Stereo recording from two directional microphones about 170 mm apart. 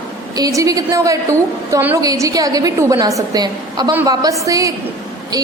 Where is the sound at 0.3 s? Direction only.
20° right (ahead or behind).